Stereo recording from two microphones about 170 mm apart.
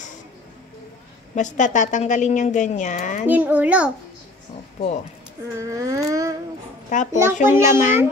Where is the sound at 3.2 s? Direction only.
10° right (ahead or behind).